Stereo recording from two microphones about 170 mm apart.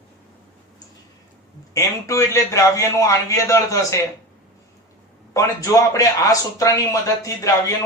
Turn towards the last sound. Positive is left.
turn(degrees=20)  # may be behind; listen again after turning